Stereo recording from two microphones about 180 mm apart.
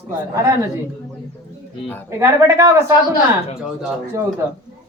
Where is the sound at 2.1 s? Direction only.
15° right (ahead or behind).